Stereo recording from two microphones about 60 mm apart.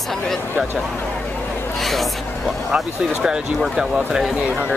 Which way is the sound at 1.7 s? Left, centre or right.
Centre.